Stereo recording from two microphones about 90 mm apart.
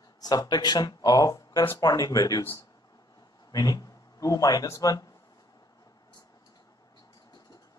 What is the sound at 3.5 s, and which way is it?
A man's voice, 45° left (ahead or behind).